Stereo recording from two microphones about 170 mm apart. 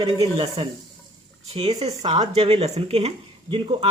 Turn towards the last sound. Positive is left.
turn(degrees=-30)  # may be behind; listen again after turning